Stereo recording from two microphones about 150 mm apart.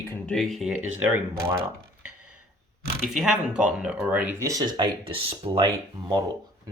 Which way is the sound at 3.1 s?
5° right (ahead or behind).